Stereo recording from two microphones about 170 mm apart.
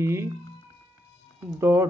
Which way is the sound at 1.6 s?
15° right (ahead or behind).